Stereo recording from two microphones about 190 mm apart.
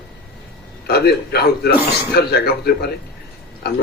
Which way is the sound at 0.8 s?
55° left (ahead or behind).